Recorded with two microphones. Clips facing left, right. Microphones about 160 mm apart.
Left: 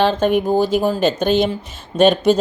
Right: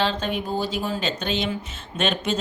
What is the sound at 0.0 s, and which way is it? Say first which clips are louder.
Speech: left 9 dB; 50° left (ahead or behind).